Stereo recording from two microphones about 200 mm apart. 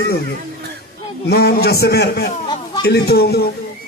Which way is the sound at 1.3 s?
50° left (ahead or behind).